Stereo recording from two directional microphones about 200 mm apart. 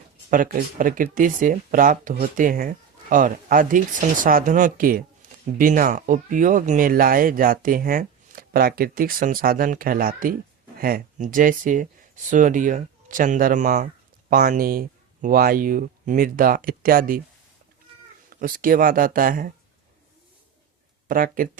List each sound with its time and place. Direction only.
0.3 s speech: 45° right (ahead or behind)
5.2 s a sound: 45° right (ahead or behind)
5.5 s speech: 40° right (ahead or behind)
18.3 s speech: 45° right (ahead or behind)
21.1 s speech: 45° right (ahead or behind)